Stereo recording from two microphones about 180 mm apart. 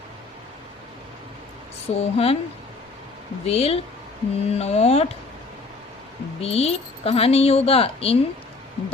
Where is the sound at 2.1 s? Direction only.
35° left (ahead or behind).